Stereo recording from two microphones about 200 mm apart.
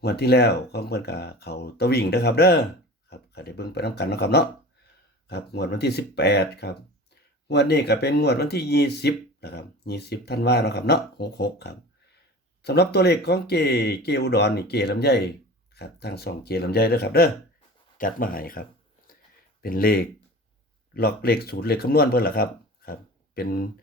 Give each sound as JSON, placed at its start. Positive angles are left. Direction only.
{"t": 0.0, "sound": "speech", "side_deg": 55}
{"t": 19.6, "sound": "speech", "side_deg": 45}